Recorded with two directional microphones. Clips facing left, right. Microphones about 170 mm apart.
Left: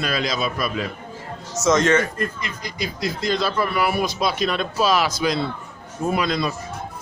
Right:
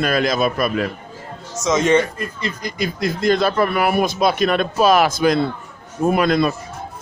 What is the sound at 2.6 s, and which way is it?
A man's voice, 50° right (ahead or behind).